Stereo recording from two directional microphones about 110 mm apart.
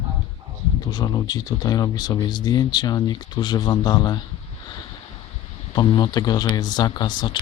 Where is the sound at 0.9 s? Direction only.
40° left (ahead or behind).